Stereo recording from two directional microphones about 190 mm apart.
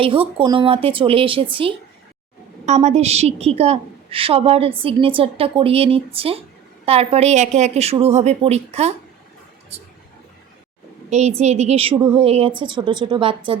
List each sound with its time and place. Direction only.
0.0 s a woman's voice: 30° right (ahead or behind)
11.1 s a woman's voice: 35° right (ahead or behind)